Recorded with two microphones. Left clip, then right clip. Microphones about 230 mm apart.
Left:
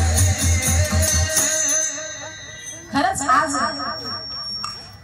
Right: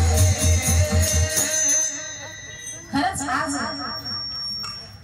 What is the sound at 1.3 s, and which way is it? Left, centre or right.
Music, centre.